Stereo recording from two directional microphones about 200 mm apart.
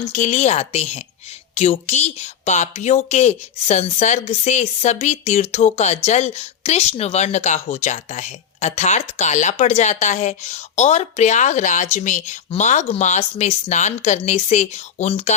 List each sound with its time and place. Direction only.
0.1 s speech: 35° left (ahead or behind)